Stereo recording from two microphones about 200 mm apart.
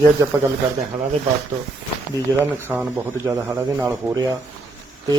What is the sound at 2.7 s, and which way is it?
Speech, 10° right (ahead or behind).